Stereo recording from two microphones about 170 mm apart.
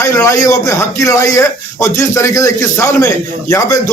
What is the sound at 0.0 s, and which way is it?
A man's voice, 15° left (ahead or behind).